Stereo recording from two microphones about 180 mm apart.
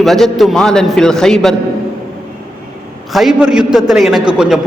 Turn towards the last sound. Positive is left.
turn(degrees=-5)  # may be behind; listen again after turning